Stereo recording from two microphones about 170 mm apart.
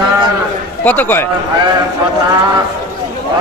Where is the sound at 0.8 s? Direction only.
10° left (ahead or behind).